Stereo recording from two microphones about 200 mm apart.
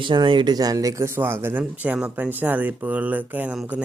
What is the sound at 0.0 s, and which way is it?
Speech, 25° right (ahead or behind).